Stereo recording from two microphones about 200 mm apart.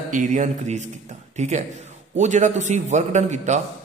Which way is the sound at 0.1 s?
40° right (ahead or behind).